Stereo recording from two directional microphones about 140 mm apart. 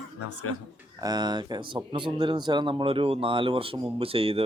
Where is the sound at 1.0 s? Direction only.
30° right (ahead or behind).